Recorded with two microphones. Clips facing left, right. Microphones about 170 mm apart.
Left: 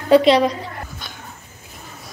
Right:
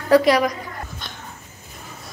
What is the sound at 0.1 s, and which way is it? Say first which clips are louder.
Speech: left 2 dB; 25° left (ahead or behind).